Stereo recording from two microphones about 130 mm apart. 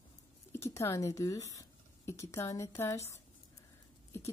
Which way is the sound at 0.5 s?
20° left (ahead or behind).